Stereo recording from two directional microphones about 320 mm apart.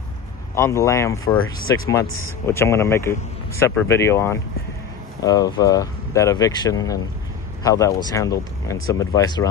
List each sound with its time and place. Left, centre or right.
0.6 s speech: centre